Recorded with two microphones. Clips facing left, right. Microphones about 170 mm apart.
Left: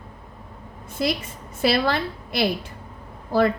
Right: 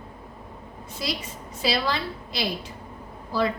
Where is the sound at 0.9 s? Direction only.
55° left (ahead or behind).